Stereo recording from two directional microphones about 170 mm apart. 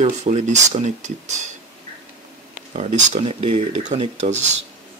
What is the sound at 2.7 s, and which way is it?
Speech, 45° right (ahead or behind).